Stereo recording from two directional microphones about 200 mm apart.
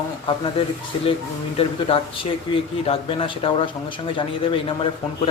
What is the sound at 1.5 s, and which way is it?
Speech, 30° left (ahead or behind).